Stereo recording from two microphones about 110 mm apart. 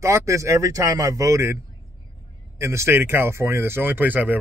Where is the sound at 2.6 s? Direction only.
25° right (ahead or behind).